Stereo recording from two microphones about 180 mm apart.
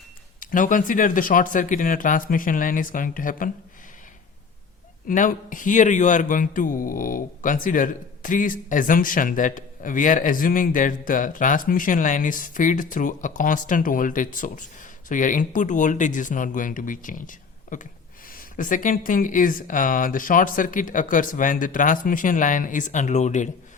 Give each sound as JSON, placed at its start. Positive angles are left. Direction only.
{"t": 0.3, "sound": "a man's voice", "side_deg": 50}
{"t": 5.0, "sound": "a man's voice", "side_deg": 50}